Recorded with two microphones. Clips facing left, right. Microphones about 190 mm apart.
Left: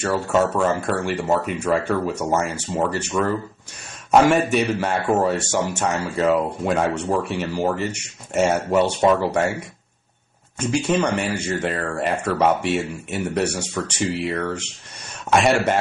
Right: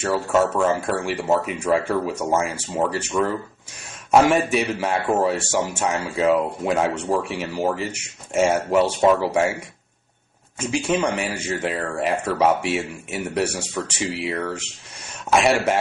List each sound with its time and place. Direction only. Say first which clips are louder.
0.0 s a man's voice: even; 5° right (ahead or behind)
10.6 s a man's voice: left 1 dB; 5° right (ahead or behind)